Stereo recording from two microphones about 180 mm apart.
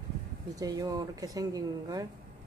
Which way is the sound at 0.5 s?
20° right (ahead or behind).